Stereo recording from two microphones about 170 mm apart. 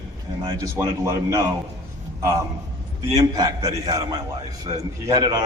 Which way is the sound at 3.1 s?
20° right (ahead or behind).